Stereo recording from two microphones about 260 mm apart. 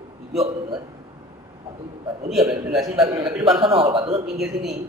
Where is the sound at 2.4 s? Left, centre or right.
Centre.